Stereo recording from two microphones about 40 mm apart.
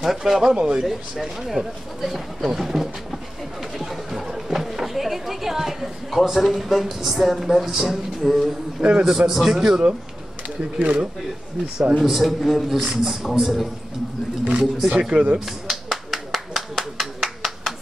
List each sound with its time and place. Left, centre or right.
0.0 s a man's voice: centre
0.6 s speech: right
0.8 s speech: centre
3.7 s chatter: centre
8.8 s speech: right
9.3 s a man's voice: centre
10.6 s speech: right
12.0 s a man's voice: centre
14.4 s speech: centre
14.9 s speech: right
15.3 s a sound: centre